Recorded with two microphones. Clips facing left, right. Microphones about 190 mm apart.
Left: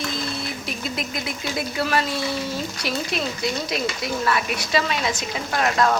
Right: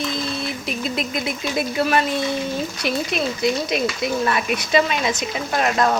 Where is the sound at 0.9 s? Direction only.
20° right (ahead or behind).